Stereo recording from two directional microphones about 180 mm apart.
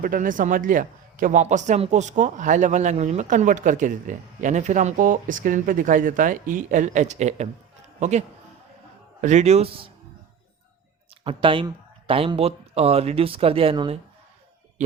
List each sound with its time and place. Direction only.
0.0 s a man's voice: 50° right (ahead or behind)
9.2 s speech: 40° right (ahead or behind)
11.2 s speech: 30° right (ahead or behind)